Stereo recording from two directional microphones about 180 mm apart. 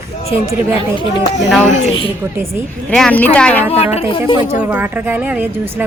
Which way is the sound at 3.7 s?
35° left (ahead or behind).